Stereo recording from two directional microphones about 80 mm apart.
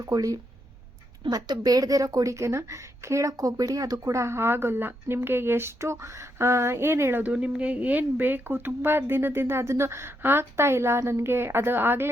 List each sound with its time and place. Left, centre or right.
0.0 s a woman's voice: right
7.3 s speech: centre